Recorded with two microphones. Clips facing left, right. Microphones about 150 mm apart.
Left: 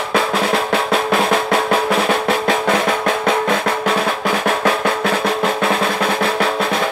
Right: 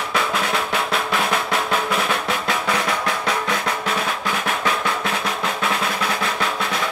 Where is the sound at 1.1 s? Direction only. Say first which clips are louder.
Left 7 dB; 50° left (ahead or behind).